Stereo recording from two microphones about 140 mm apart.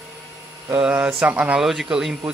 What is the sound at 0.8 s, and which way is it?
Speech, 10° right (ahead or behind).